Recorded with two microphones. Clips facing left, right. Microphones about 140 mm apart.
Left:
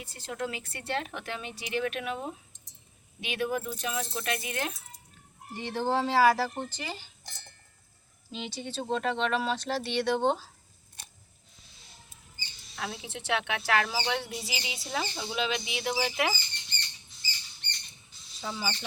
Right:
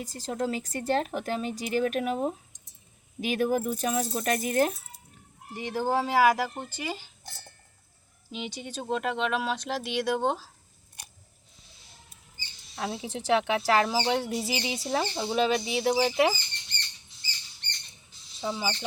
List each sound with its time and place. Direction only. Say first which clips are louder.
0.0 s speech: right 5 dB; 35° right (ahead or behind)
5.5 s speech: right 1 dB; 10° right (ahead or behind)
8.3 s speech: right 1 dB; 15° right (ahead or behind)
11.0 s a sound: right 1 dB; 15° right (ahead or behind)
12.7 s speech: right 5 dB; 30° right (ahead or behind)
17.6 s rodents: right 1 dB; 5° left (ahead or behind)
18.3 s speech: right 4 dB; 20° right (ahead or behind)